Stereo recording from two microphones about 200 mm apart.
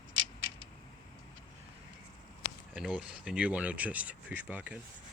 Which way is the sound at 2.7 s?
5° right (ahead or behind).